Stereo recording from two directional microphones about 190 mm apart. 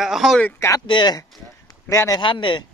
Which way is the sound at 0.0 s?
Centre (ahead or behind).